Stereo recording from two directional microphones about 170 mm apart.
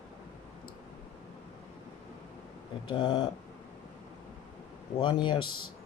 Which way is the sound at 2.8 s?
25° left (ahead or behind).